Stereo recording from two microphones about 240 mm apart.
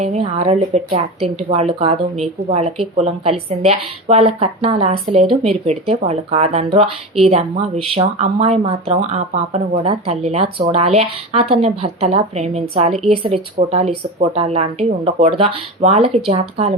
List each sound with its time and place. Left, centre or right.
0.0 s speech: right